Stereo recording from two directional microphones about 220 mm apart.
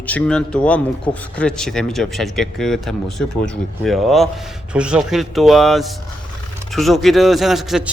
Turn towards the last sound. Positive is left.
turn(degrees=0)  # may be behind; listen again after turning